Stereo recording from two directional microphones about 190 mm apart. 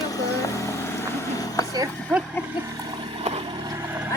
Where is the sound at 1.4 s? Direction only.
20° left (ahead or behind).